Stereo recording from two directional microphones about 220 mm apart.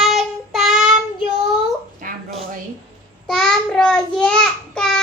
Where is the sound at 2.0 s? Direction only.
40° right (ahead or behind).